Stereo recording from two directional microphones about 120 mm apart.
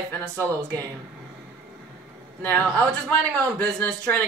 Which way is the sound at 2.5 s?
5° left (ahead or behind).